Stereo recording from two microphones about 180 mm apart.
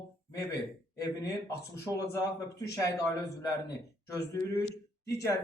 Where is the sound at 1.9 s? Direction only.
20° left (ahead or behind).